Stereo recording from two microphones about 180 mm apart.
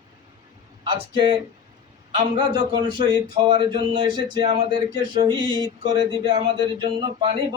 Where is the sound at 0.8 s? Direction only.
25° right (ahead or behind).